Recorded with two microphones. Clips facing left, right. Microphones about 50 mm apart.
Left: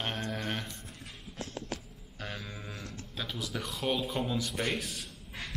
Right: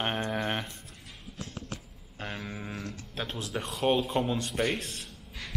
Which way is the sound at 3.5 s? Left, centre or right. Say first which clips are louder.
Right 6 dB; right.